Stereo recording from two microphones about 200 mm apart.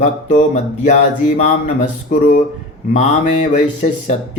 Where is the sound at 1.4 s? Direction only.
35° left (ahead or behind).